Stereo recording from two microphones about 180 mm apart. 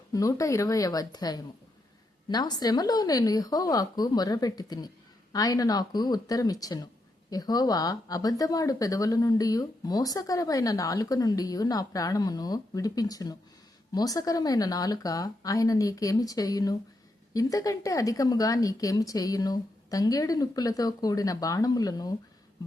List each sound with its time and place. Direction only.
0.1 s speech: 20° left (ahead or behind)